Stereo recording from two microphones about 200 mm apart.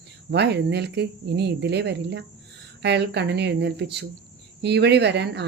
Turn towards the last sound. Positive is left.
turn(degrees=-60)  # may be behind; listen again after turning